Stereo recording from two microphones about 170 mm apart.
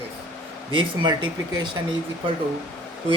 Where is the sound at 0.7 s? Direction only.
25° right (ahead or behind).